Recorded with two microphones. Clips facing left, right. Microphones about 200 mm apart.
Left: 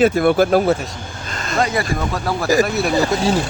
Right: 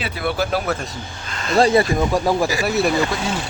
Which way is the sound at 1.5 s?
30° right (ahead or behind).